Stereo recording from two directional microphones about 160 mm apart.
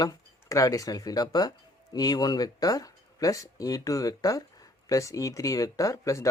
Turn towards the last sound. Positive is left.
turn(degrees=20)  # may be behind; listen again after turning